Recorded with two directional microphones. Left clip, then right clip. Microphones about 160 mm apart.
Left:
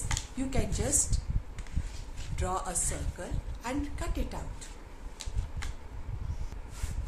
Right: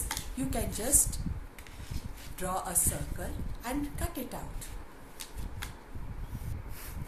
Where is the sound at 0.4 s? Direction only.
20° left (ahead or behind).